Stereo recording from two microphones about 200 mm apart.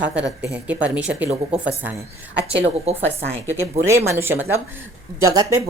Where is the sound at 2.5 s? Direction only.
30° right (ahead or behind).